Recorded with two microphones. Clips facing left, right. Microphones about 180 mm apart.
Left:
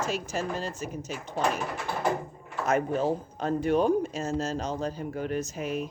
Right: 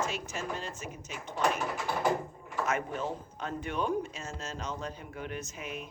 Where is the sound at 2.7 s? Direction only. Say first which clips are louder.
Left 9 dB; 35° left (ahead or behind).